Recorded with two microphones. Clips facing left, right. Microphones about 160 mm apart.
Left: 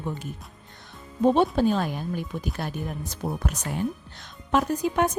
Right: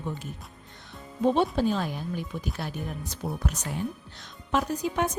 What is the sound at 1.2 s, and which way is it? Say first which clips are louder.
A woman's voice: left 3 dB; 50° left (ahead or behind).